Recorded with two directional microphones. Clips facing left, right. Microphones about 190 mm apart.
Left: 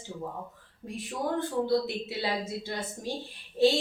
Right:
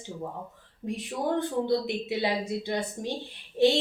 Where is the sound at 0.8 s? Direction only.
20° right (ahead or behind).